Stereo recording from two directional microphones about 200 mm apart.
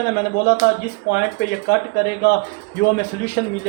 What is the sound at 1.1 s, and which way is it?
Speech, 55° left (ahead or behind).